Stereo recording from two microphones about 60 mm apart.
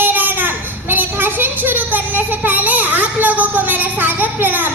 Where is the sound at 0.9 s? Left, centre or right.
Right.